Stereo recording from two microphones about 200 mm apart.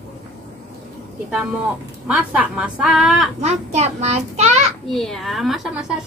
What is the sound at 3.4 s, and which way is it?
A child's voice, 35° right (ahead or behind).